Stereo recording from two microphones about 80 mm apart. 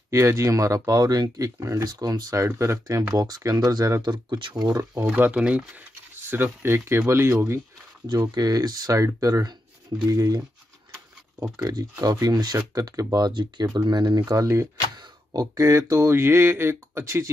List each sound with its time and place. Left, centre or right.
0.1 s speech: right
3.2 s speech: right
4.1 s speech: right
4.6 s speech: right
5.1 s speech: centre; by 7.6 s right
8.4 s speech: right
11.5 s speech: right
13.3 s speech: right
15.0 s a sound: right